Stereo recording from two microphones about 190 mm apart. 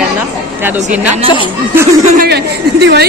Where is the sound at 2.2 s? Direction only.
60° right (ahead or behind).